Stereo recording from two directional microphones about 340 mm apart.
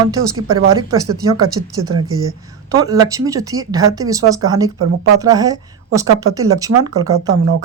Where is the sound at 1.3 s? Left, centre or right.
Right.